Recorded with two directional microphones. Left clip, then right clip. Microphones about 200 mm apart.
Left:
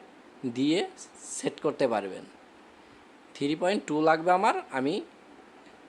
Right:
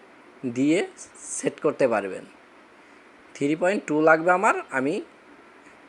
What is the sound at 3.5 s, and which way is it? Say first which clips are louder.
Speech: right 4 dB; centre (ahead or behind).